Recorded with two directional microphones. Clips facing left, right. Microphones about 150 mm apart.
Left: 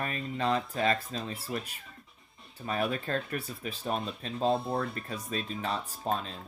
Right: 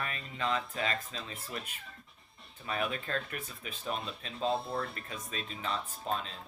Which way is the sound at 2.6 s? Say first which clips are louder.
Left 4 dB; 40° left (ahead or behind).